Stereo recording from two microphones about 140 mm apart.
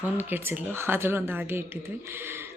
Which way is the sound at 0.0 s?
15° right (ahead or behind).